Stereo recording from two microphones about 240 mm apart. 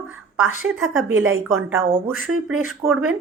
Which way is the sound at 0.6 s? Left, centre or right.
Right.